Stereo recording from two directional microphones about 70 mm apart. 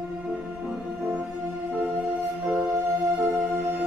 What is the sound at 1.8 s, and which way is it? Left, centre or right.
Music, right.